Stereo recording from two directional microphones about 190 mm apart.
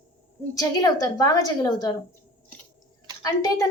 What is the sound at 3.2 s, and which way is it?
Speech, 20° left (ahead or behind).